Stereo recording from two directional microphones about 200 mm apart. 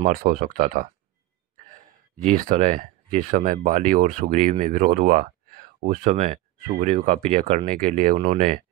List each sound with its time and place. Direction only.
0.0 s speech: 45° right (ahead or behind)
2.2 s speech: 40° right (ahead or behind)